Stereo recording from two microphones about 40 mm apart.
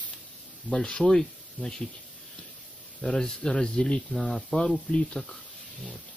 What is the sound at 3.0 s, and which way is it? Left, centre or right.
Speech, centre.